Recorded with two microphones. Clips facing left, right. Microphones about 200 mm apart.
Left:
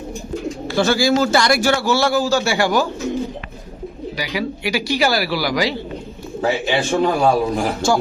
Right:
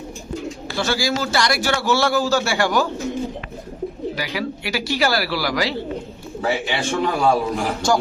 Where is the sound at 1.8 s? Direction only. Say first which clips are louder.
Left 2 dB; centre (ahead or behind).